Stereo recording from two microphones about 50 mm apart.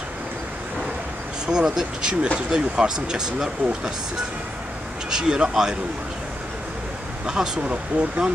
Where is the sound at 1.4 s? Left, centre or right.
Centre.